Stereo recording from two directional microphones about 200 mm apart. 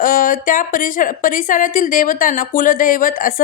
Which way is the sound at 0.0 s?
45° left (ahead or behind).